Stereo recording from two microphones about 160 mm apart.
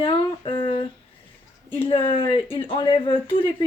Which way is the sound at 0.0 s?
30° left (ahead or behind).